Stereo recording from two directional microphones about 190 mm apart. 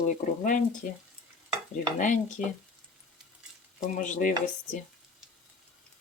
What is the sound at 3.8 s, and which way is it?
Speech, 40° left (ahead or behind).